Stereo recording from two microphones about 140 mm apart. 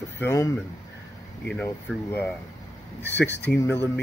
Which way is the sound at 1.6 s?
15° left (ahead or behind).